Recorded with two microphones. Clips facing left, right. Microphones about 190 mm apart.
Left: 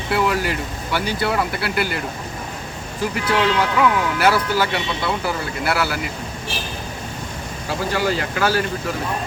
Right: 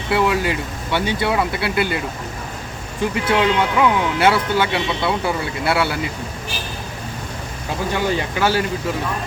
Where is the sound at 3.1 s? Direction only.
25° right (ahead or behind).